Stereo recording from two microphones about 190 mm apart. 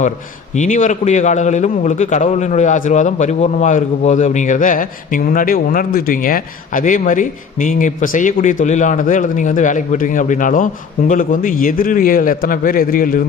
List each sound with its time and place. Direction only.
0.5 s a man's voice: 40° left (ahead or behind)